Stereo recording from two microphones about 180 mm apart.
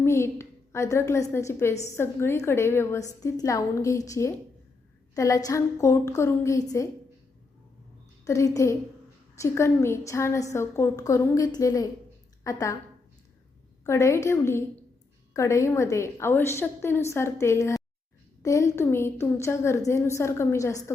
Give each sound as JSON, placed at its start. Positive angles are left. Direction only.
{"t": 0.0, "sound": "a woman's voice", "side_deg": 15}
{"t": 8.2, "sound": "a woman's voice", "side_deg": 15}
{"t": 13.8, "sound": "a woman's voice", "side_deg": 15}